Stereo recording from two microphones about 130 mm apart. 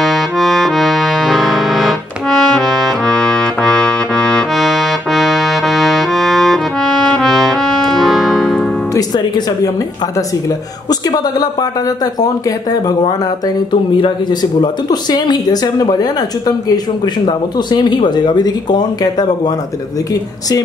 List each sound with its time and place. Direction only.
0.0 s accordion: centre (ahead or behind)
8.9 s music: 30° left (ahead or behind)
10.9 s speech: 30° left (ahead or behind)